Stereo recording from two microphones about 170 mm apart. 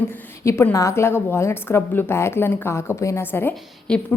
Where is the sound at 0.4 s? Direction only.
15° left (ahead or behind).